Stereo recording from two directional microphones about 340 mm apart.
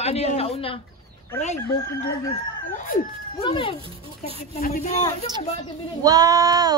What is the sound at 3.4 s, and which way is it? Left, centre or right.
A man's voice, centre.